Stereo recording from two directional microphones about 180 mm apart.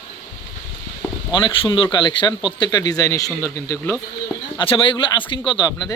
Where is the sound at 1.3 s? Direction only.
25° left (ahead or behind).